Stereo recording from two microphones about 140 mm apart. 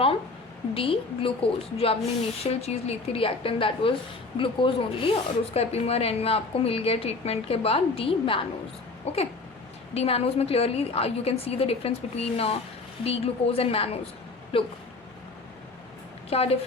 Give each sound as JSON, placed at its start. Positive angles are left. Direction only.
{"t": 0.7, "sound": "a woman's voice", "side_deg": 40}
{"t": 16.3, "sound": "a woman's voice", "side_deg": 45}